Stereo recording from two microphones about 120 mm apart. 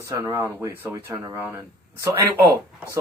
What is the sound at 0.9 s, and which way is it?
Speech, 30° right (ahead or behind).